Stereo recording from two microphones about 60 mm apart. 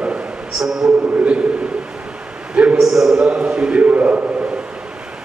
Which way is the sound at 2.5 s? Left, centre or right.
Right.